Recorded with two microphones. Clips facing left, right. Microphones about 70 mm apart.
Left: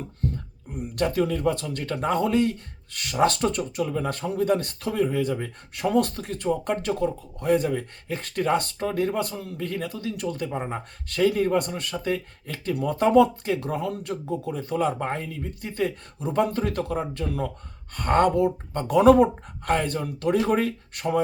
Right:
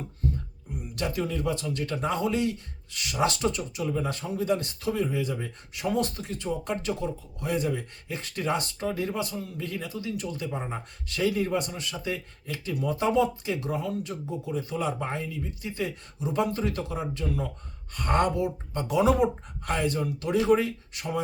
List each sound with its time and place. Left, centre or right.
0.7 s speech: left